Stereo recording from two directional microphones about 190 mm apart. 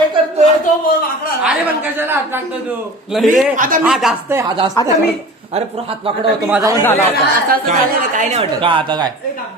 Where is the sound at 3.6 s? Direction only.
45° right (ahead or behind).